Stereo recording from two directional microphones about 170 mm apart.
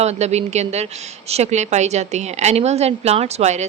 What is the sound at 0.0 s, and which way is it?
A woman's voice, 40° right (ahead or behind).